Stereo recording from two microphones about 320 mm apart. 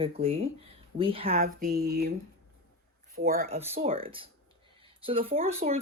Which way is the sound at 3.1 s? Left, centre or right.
Right.